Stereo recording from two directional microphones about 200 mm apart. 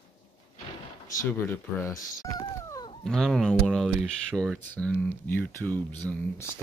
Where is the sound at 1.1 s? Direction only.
10° left (ahead or behind).